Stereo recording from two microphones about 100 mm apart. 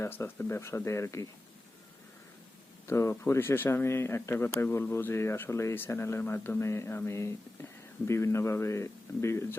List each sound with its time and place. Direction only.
0.0 s speech: 25° left (ahead or behind)
2.8 s speech: 25° left (ahead or behind)